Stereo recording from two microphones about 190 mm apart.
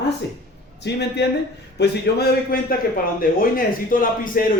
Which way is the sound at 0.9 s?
65° left (ahead or behind).